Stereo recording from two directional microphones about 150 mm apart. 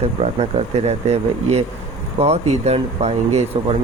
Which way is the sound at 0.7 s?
45° right (ahead or behind).